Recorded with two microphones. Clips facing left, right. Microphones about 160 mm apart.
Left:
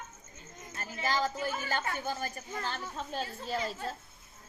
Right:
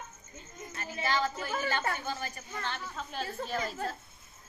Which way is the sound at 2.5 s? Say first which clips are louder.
Left 1 dB; 35° left (ahead or behind).